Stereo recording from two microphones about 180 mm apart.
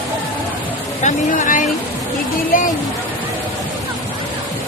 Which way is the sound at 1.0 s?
45° left (ahead or behind).